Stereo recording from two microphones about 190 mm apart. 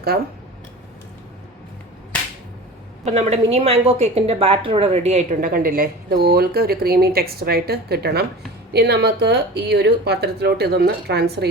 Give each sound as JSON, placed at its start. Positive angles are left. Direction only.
{"t": 3.0, "sound": "a woman's voice", "side_deg": -35}